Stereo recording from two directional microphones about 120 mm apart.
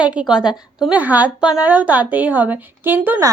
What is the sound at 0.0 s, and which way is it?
A woman's voice, 10° right (ahead or behind).